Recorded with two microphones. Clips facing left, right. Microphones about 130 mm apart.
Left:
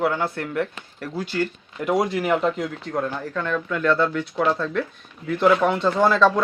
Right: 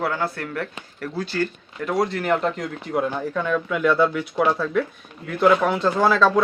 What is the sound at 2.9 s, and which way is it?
Speech, 10° right (ahead or behind).